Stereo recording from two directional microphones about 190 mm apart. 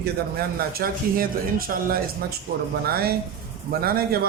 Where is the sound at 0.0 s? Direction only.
55° right (ahead or behind).